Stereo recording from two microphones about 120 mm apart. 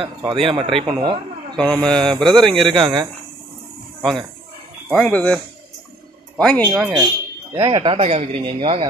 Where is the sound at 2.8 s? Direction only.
40° right (ahead or behind).